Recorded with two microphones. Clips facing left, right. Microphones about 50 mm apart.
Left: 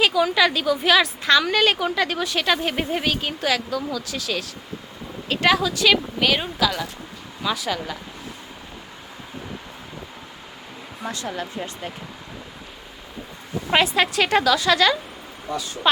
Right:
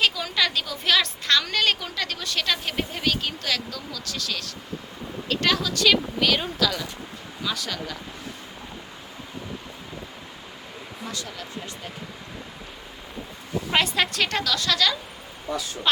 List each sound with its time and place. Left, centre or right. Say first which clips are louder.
0.0 s a woman's voice: left 6 dB; centre
11.0 s speech: left 7 dB; left
13.7 s a woman's voice: left 4 dB; centre